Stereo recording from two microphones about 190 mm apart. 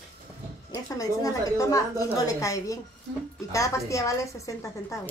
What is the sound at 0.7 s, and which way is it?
A woman's voice, 20° left (ahead or behind).